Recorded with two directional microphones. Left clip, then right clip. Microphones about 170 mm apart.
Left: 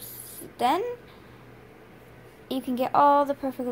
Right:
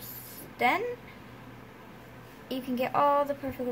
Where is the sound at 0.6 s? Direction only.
30° left (ahead or behind).